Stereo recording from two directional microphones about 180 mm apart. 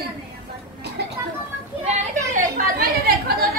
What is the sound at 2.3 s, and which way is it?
Chatter, 55° right (ahead or behind).